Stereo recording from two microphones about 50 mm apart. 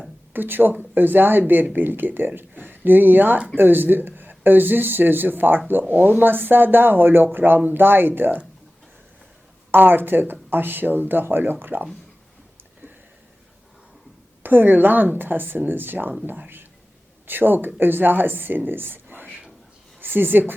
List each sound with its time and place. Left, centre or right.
0.3 s speech: right
9.7 s speech: right
14.4 s speech: right
17.2 s speech: right